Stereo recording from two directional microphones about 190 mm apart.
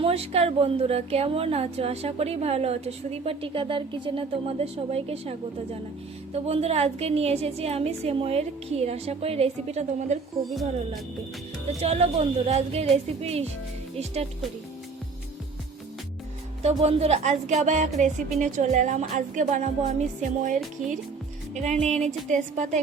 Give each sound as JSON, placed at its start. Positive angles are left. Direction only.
{"t": 0.0, "sound": "speech", "side_deg": -30}
{"t": 6.3, "sound": "speech", "side_deg": -35}
{"t": 10.4, "sound": "speech", "side_deg": 0}
{"t": 11.8, "sound": "speech", "side_deg": -30}
{"t": 16.6, "sound": "speech", "side_deg": -35}